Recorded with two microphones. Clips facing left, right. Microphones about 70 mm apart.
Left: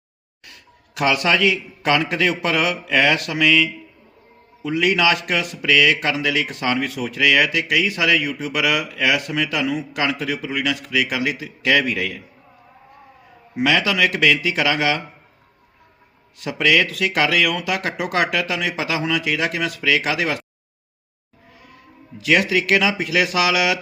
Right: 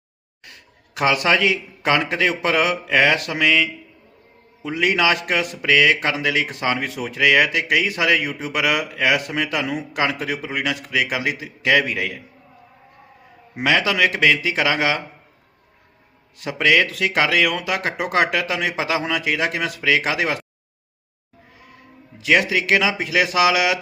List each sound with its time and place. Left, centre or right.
0.4 s speech: right
13.6 s speech: right
16.4 s speech: right
22.2 s speech: centre